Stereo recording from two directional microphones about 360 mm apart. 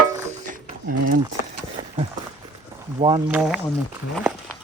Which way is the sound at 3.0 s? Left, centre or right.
Centre.